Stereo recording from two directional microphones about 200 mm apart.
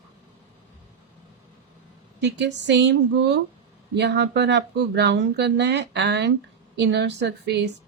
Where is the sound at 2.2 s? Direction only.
60° right (ahead or behind).